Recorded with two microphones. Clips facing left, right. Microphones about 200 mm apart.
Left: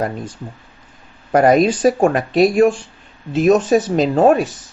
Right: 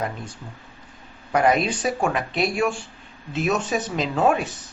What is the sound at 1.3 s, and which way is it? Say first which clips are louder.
Speech: left 8 dB; 45° left (ahead or behind).